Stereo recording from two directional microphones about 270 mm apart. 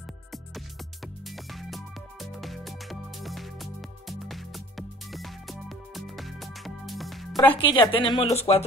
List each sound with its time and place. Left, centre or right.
0.3 s music: centre
7.3 s speech: centre